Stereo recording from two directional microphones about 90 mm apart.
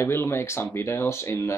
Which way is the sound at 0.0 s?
30° left (ahead or behind).